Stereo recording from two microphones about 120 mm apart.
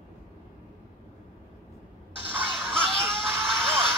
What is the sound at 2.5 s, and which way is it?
Music, centre (ahead or behind).